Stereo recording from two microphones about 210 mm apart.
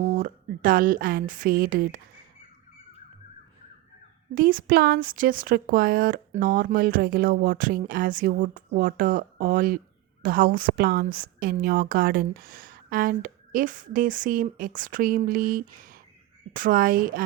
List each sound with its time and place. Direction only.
0.0 s a woman's voice: 40° right (ahead or behind)
4.4 s a woman's voice: 40° right (ahead or behind)